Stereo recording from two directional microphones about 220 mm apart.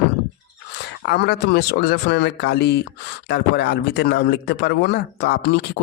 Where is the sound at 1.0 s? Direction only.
50° left (ahead or behind).